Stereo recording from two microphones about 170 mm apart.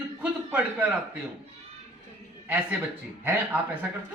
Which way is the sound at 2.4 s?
10° right (ahead or behind).